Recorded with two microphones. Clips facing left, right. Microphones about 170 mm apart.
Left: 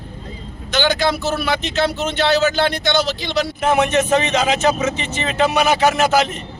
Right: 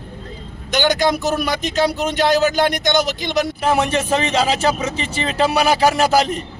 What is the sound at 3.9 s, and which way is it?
A man's voice, 30° right (ahead or behind).